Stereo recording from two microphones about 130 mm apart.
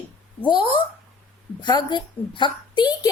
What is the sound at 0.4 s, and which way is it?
A woman's voice, 40° left (ahead or behind).